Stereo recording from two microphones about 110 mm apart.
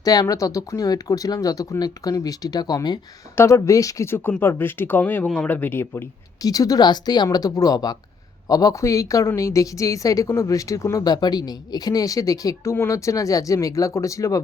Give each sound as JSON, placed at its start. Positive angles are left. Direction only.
{"t": 0.0, "sound": "a woman's voice", "side_deg": 35}
{"t": 3.3, "sound": "speech", "side_deg": 25}
{"t": 6.4, "sound": "a woman's voice", "side_deg": 35}